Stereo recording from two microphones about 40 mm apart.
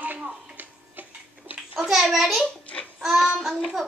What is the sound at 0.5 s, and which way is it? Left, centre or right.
Tick-tock, right.